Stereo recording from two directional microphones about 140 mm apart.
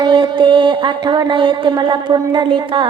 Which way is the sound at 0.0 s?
35° right (ahead or behind).